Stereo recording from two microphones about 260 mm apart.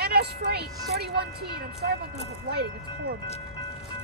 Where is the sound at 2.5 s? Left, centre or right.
Right.